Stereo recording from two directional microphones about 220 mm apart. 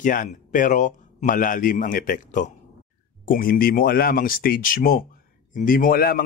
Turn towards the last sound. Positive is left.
turn(degrees=40)  # may be behind; listen again after turning